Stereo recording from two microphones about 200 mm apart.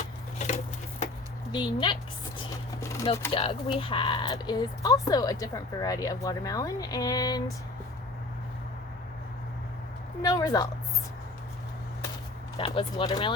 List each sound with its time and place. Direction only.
0.0 s a sound: 35° left (ahead or behind)
1.5 s speech: 25° left (ahead or behind)
2.8 s a sound: 15° left (ahead or behind)
3.3 s speech: 25° left (ahead or behind)
10.2 s a woman's voice: 15° left (ahead or behind)
12.5 s speech: 25° left (ahead or behind)